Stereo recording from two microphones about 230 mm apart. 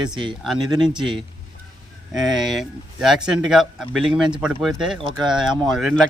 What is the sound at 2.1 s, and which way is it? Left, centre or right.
Speech, centre.